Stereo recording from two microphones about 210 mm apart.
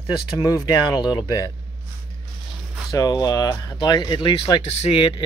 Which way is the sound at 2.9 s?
15° left (ahead or behind).